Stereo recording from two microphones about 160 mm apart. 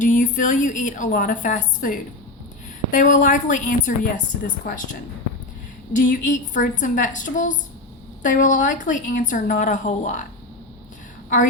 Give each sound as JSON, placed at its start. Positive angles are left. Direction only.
{"t": 0.0, "sound": "a woman's voice", "side_deg": 55}
{"t": 5.9, "sound": "a woman's voice", "side_deg": 55}